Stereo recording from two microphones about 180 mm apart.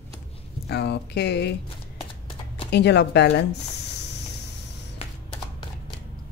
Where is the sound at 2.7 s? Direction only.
70° left (ahead or behind).